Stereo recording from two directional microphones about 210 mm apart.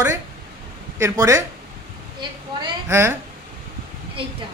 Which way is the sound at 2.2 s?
15° right (ahead or behind).